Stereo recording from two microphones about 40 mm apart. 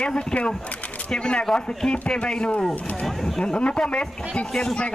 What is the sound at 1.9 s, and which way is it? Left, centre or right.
Speech, left.